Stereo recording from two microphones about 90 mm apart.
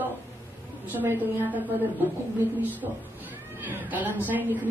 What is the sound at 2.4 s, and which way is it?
A woman's voice, 20° right (ahead or behind).